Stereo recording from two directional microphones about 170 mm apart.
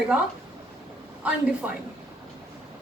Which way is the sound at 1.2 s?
10° right (ahead or behind).